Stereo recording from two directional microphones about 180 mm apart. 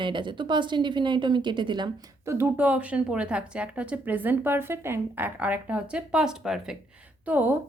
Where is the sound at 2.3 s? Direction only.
10° right (ahead or behind).